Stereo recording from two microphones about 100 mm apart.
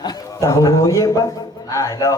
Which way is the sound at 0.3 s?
30° left (ahead or behind).